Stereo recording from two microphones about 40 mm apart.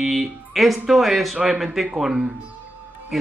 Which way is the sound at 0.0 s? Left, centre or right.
Centre.